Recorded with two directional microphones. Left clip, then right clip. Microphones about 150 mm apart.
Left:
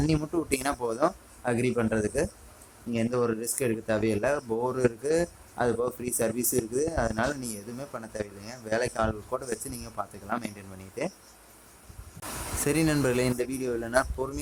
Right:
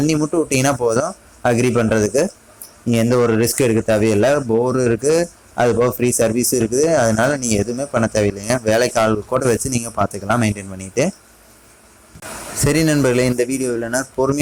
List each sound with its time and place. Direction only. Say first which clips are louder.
0.2 s speech: right 12 dB; 25° right (ahead or behind)
2.9 s speech: right 12 dB; 35° right (ahead or behind)
12.5 s speech: right 10 dB; 25° right (ahead or behind)